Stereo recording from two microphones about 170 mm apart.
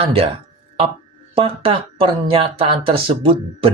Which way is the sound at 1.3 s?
30° right (ahead or behind).